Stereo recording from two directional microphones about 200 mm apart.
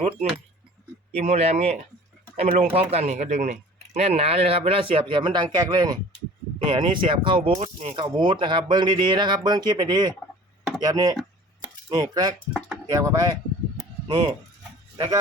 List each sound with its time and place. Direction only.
0.0 s speech: 35° right (ahead or behind)
11.6 s chopping: 20° right (ahead or behind)
12.9 s speech: 15° right (ahead or behind)